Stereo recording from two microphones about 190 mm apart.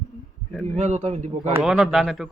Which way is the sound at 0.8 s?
35° right (ahead or behind).